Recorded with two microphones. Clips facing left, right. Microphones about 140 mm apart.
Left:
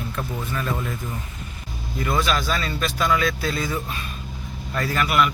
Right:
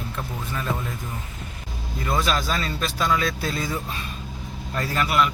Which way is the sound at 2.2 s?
35° right (ahead or behind).